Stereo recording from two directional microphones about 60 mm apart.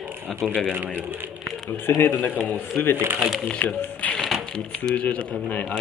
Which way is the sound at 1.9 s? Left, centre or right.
Left.